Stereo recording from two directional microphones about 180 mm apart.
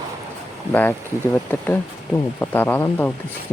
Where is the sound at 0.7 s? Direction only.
10° left (ahead or behind).